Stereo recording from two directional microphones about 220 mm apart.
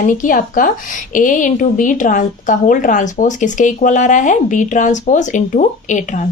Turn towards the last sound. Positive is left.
turn(degrees=35)  # may be behind; listen again after turning